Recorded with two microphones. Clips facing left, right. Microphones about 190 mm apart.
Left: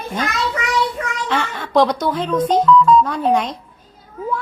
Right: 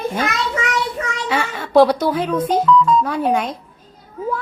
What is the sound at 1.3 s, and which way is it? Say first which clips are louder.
Speech: right 3 dB; 10° right (ahead or behind).